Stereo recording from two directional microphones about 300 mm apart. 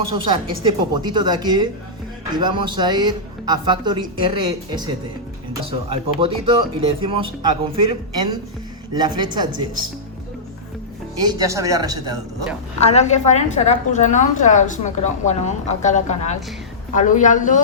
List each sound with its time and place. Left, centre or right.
0.1 s speech: centre
6.1 s speech: centre
11.2 s speech: centre
12.8 s a woman's voice: left